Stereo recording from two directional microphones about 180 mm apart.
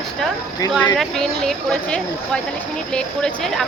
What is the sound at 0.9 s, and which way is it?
Speech, centre (ahead or behind).